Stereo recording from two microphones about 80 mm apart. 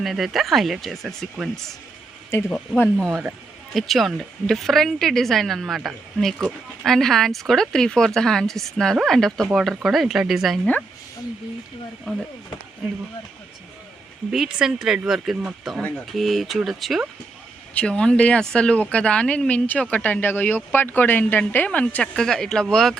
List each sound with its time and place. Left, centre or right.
0.0 s speech: centre
2.3 s speech: left
3.1 s speech: centre
14.3 s speech: centre
17.7 s speech: centre